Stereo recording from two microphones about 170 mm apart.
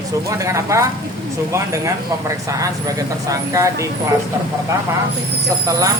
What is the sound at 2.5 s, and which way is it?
A woman's voice, 20° right (ahead or behind).